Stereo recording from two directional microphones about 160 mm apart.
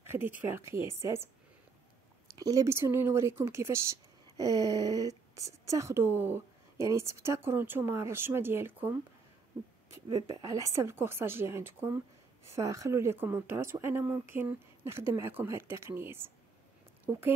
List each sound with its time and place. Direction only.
0.0 s speech: 15° right (ahead or behind)
2.3 s speech: 20° right (ahead or behind)
10.0 s a woman's voice: 20° right (ahead or behind)